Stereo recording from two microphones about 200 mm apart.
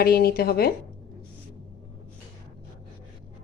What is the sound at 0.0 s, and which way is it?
Speech, 50° left (ahead or behind).